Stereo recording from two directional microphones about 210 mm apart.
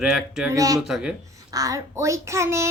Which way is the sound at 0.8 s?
Centre (ahead or behind).